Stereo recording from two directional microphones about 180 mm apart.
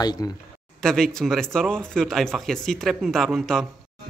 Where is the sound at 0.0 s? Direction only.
20° left (ahead or behind).